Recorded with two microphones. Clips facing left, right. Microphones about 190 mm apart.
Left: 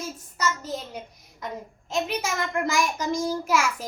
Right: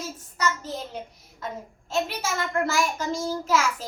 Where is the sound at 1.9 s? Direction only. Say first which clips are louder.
Even; 15° left (ahead or behind).